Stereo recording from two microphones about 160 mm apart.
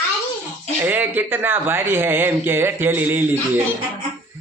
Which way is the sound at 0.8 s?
10° right (ahead or behind).